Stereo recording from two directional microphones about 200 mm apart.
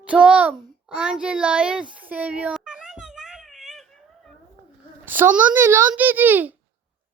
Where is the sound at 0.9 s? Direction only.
5° right (ahead or behind).